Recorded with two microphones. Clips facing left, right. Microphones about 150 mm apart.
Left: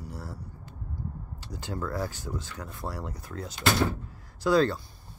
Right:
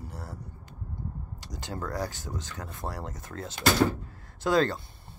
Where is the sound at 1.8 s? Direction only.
40° right (ahead or behind).